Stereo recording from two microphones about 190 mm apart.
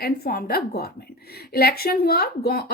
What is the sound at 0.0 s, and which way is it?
A woman's voice, 50° left (ahead or behind).